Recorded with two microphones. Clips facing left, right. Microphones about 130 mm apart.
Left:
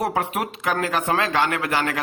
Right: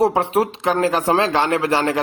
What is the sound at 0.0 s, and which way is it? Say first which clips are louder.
Speech: right 7 dB; 30° right (ahead or behind).